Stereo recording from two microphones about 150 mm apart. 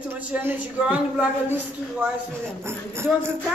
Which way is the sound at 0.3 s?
10° right (ahead or behind).